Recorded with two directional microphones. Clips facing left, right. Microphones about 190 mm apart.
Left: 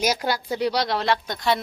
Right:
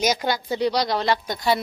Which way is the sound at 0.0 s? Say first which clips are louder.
Right 1 dB; 5° left (ahead or behind).